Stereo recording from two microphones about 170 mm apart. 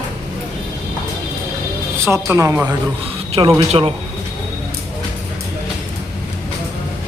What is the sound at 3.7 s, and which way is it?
Speech, 35° right (ahead or behind).